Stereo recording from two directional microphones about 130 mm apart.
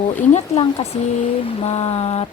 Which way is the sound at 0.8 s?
55° left (ahead or behind).